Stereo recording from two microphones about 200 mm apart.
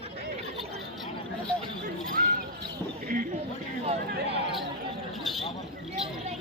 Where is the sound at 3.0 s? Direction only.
45° right (ahead or behind).